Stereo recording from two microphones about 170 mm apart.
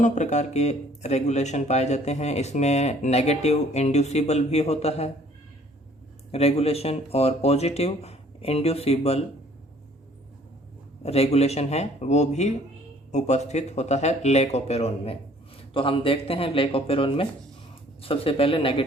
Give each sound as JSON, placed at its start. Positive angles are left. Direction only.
{"t": 0.0, "sound": "speech", "side_deg": 45}
{"t": 6.3, "sound": "speech", "side_deg": 35}
{"t": 11.0, "sound": "speech", "side_deg": 35}